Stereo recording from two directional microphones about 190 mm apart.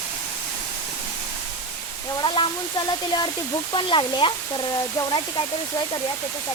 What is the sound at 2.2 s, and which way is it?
Speech, 25° left (ahead or behind).